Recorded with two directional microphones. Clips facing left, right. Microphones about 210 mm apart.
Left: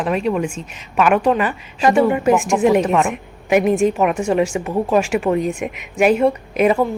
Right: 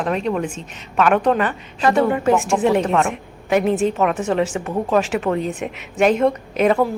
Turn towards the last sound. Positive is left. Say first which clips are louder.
# left 1 dB
turn(degrees=10)  # may be behind; listen again after turning